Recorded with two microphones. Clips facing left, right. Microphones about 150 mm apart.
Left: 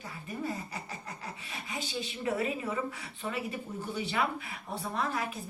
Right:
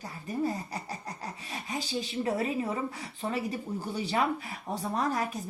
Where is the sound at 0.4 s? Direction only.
35° right (ahead or behind).